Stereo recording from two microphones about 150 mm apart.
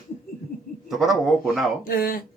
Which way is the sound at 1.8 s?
70° left (ahead or behind).